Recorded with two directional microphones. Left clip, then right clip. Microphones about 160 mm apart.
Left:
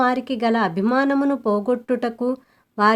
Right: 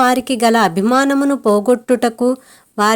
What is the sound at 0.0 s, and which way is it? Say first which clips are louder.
Speech: right 7 dB; 25° right (ahead or behind).